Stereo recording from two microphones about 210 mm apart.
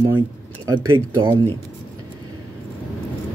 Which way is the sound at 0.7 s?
15° right (ahead or behind).